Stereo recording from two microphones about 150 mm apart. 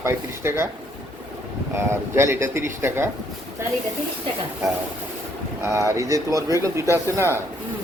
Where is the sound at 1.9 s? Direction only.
15° right (ahead or behind).